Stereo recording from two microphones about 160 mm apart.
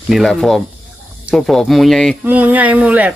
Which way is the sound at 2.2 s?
10° right (ahead or behind).